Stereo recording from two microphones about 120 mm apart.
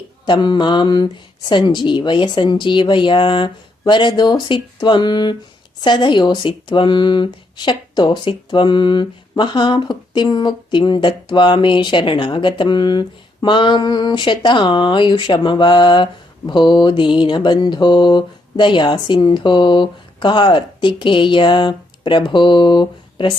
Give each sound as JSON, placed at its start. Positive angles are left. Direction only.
{"t": 0.3, "sound": "speech", "side_deg": 40}